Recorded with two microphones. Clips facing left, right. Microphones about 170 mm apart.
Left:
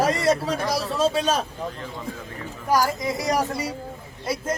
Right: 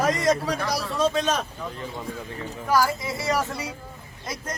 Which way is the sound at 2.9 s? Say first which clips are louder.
Left 2 dB; 40° left (ahead or behind).